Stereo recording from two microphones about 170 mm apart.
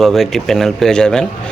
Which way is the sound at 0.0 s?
Centre (ahead or behind).